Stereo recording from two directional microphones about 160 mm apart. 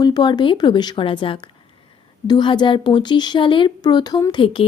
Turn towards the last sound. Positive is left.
turn(degrees=30)  # may be behind; listen again after turning